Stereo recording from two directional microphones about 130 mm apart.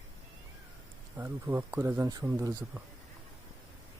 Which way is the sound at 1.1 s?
20° right (ahead or behind).